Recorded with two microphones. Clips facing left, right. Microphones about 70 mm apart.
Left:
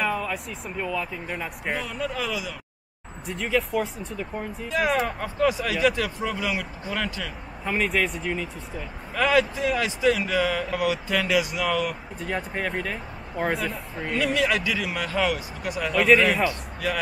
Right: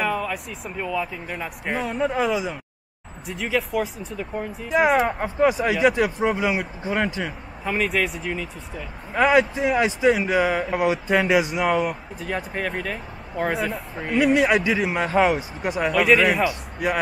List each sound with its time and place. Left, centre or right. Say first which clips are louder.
0.1 s speech: right 2 dB; centre
1.9 s speech: right 7 dB; right
3.3 s speech: even; centre
4.7 s speech: right 5 dB; centre
7.6 s speech: right 1 dB; centre
9.1 s speech: right 4 dB; right
12.2 s speech: even; centre
14.1 s speech: right 6 dB; right
15.9 s speech: even; centre
16.4 s speech: right 3 dB; right